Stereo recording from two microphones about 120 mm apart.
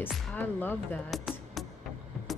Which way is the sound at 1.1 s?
Centre (ahead or behind).